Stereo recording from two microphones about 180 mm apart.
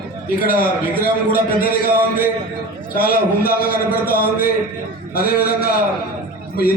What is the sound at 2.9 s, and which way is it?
A man's voice, 55° left (ahead or behind).